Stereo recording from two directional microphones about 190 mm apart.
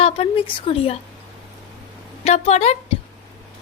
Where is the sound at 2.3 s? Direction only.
35° left (ahead or behind).